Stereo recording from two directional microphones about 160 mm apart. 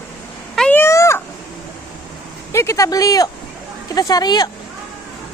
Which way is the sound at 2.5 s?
20° left (ahead or behind).